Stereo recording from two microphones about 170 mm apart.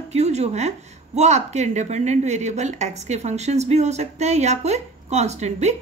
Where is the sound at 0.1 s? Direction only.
40° right (ahead or behind).